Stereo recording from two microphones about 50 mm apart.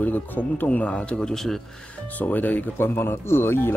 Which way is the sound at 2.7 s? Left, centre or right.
Left.